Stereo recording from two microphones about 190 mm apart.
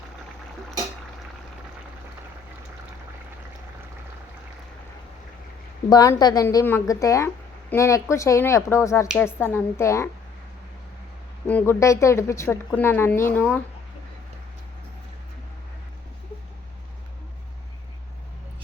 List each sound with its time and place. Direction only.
5.9 s a woman's voice: 20° left (ahead or behind)
11.4 s a woman's voice: 10° left (ahead or behind)